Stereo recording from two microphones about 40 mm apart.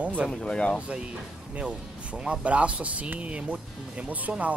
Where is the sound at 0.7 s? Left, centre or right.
Right.